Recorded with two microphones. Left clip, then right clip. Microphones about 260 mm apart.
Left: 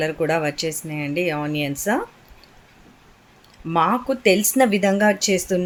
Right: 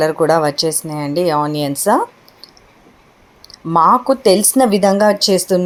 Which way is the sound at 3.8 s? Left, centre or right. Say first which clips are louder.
Right 11 dB; centre.